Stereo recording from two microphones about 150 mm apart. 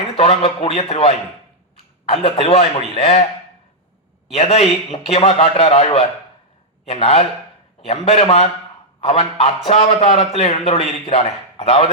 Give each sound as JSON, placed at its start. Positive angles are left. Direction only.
{"t": 0.2, "sound": "a man's voice", "side_deg": 40}
{"t": 4.3, "sound": "a man's voice", "side_deg": 45}